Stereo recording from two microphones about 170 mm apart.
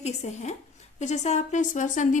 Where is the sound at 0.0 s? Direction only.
40° left (ahead or behind).